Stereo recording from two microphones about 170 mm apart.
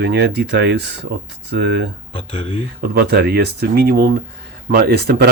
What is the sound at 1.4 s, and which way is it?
Speech, 85° right.